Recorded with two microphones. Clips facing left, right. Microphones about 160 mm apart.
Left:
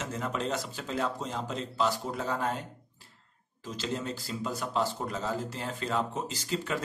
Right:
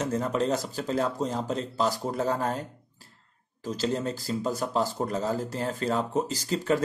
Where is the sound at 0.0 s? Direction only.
40° right (ahead or behind).